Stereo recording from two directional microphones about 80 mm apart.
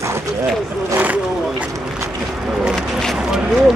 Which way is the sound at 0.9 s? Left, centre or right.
Centre.